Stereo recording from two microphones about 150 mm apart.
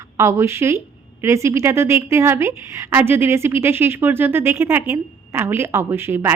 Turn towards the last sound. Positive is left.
turn(degrees=-15)  # may be behind; listen again after turning